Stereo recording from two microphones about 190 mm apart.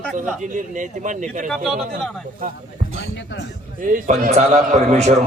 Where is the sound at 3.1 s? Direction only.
75° left (ahead or behind).